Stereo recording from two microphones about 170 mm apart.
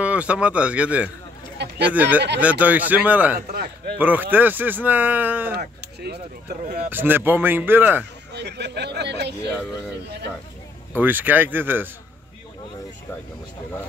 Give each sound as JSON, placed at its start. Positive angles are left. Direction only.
{"t": 0.0, "sound": "speech", "side_deg": -5}
{"t": 1.6, "sound": "a sound", "side_deg": -90}
{"t": 2.0, "sound": "speech", "side_deg": -10}
{"t": 6.6, "sound": "speech", "side_deg": -60}
{"t": 6.9, "sound": "speech", "side_deg": -10}
{"t": 8.3, "sound": "a sound", "side_deg": -80}
{"t": 11.0, "sound": "speech", "side_deg": -10}